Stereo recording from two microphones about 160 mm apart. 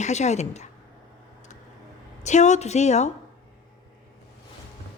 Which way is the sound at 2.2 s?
45° left (ahead or behind).